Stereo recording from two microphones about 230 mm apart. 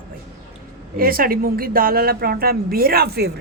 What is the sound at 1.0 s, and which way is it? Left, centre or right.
A woman's voice, right.